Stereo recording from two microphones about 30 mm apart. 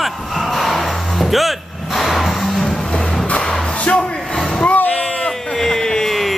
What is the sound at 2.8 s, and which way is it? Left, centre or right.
Music, centre.